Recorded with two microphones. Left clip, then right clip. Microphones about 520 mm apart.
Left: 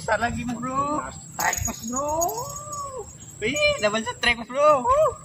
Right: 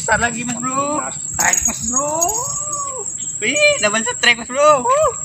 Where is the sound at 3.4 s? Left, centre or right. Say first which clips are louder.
Right 7 dB; left.